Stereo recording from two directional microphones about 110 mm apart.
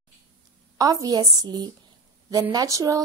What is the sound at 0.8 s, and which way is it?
A woman's voice, 35° right (ahead or behind).